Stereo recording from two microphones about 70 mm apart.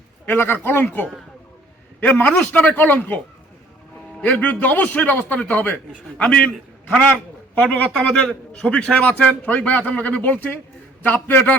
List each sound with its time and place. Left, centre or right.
0.3 s a man's voice: left
2.0 s a man's voice: left
4.2 s a man's voice: left
7.5 s a man's voice: centre